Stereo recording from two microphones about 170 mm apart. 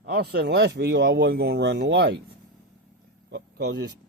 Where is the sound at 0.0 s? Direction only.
80° right.